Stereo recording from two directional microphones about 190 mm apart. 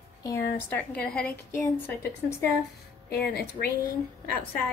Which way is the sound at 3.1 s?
55° left (ahead or behind).